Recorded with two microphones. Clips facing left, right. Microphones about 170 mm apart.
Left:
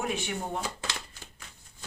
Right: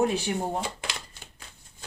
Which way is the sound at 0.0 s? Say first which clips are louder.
Right 7 dB; 35° right (ahead or behind).